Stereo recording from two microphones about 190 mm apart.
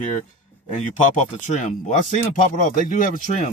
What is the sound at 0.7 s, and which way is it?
Speech, 40° left (ahead or behind).